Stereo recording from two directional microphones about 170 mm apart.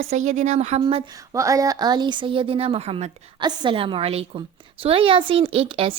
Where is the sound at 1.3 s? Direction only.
20° right (ahead or behind).